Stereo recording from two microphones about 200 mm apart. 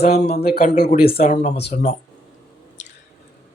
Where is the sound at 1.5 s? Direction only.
55° left (ahead or behind).